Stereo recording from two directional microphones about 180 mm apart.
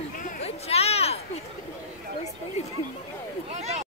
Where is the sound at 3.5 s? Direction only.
40° right (ahead or behind).